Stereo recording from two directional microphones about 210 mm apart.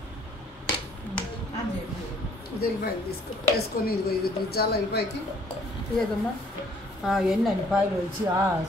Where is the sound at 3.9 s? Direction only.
50° left (ahead or behind).